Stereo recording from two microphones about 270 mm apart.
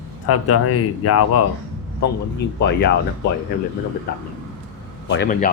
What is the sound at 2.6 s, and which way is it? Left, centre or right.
Speech, left.